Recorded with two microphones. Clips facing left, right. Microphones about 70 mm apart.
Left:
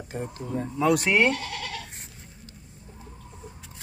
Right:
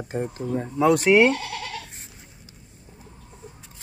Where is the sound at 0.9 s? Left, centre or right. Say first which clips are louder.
Right 5 dB; centre.